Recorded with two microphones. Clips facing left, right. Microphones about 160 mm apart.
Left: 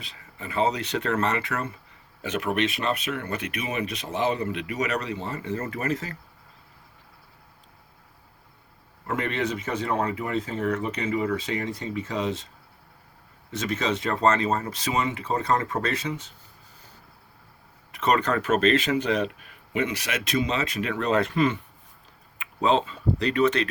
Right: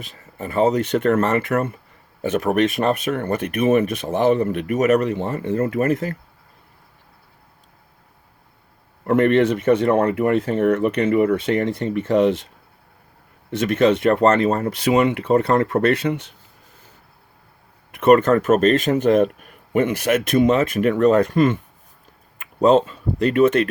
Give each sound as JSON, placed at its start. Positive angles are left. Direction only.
{"t": 0.0, "sound": "speech", "side_deg": -50}
{"t": 9.0, "sound": "speech", "side_deg": -55}
{"t": 13.5, "sound": "speech", "side_deg": -60}
{"t": 17.9, "sound": "speech", "side_deg": -55}